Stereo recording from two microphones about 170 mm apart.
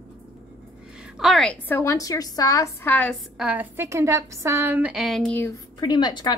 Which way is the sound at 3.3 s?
10° right (ahead or behind).